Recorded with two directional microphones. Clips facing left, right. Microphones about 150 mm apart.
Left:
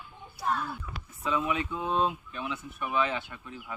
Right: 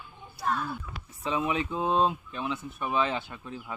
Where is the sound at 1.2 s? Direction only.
30° right (ahead or behind).